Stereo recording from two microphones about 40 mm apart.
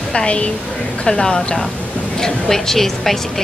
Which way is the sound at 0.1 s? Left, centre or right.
Left.